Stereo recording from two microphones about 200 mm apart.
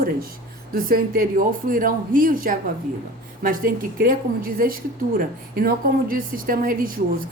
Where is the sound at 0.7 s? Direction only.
45° right (ahead or behind).